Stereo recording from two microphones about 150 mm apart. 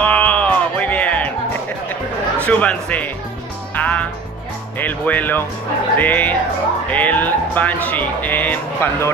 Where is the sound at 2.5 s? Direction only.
10° left (ahead or behind).